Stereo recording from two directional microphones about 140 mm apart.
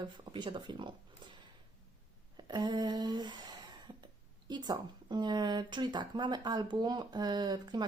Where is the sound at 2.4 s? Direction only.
30° right (ahead or behind).